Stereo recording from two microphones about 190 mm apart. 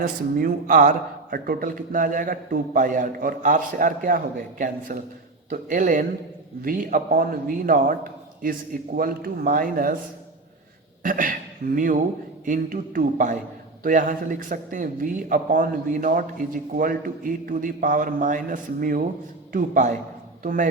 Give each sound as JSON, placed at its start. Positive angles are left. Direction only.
{"t": 0.0, "sound": "a man's voice", "side_deg": -45}
{"t": 11.0, "sound": "a man's voice", "side_deg": -45}